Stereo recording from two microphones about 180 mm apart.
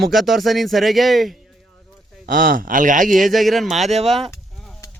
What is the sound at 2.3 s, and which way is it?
Speech, 50° right (ahead or behind).